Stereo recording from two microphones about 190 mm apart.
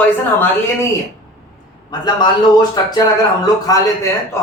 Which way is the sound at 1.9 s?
20° left (ahead or behind).